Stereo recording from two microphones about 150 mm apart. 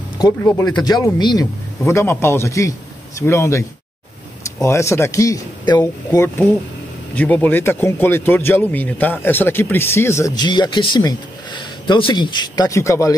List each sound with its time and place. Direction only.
0.2 s speech: 15° left (ahead or behind)
0.8 s speech: 25° left (ahead or behind)
1.9 s speech: 15° left (ahead or behind)